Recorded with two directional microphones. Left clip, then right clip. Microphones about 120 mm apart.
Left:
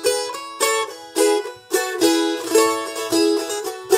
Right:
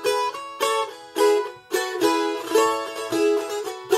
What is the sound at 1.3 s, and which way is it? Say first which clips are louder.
Music: left 1 dB; 30° left (ahead or behind).